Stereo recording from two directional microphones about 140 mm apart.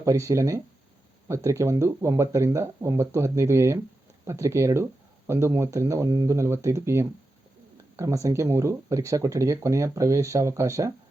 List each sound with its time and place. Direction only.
0.0 s speech: 20° right (ahead or behind)